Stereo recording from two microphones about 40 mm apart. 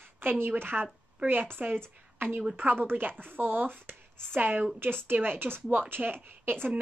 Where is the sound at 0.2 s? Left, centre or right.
Right.